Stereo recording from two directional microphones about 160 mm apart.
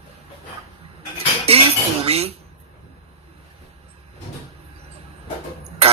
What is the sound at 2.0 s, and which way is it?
Speech, 40° right (ahead or behind).